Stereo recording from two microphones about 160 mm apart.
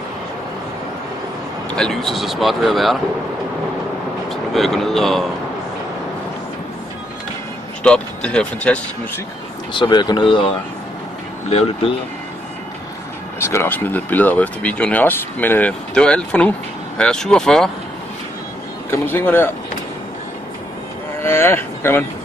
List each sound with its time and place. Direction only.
1.7 s speech: 5° left (ahead or behind)
4.3 s speech: centre (ahead or behind)
7.8 s speech: 5° left (ahead or behind)
9.8 s speech: 25° left (ahead or behind)
13.4 s speech: 15° left (ahead or behind)
18.9 s speech: 15° left (ahead or behind)
21.2 s speech: 15° left (ahead or behind)